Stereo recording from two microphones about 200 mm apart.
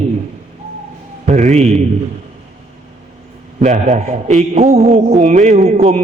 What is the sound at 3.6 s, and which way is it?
A man's voice, 35° right (ahead or behind).